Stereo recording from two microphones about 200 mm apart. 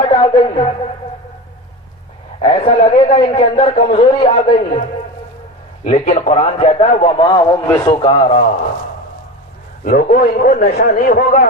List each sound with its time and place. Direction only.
0.1 s a woman's voice: 30° left (ahead or behind)
2.4 s a man's voice: 30° left (ahead or behind)
5.8 s a man's voice: 35° left (ahead or behind)
7.2 s a man's voice: 20° left (ahead or behind)
9.8 s a man's voice: 40° left (ahead or behind)